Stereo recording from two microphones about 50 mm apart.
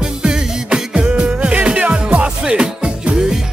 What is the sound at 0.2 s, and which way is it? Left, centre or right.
Music, centre.